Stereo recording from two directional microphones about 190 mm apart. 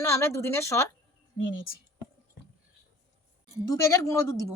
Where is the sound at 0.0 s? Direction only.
15° left (ahead or behind).